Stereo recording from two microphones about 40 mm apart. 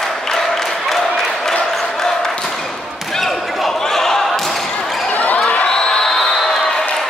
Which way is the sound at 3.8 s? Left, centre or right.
Centre.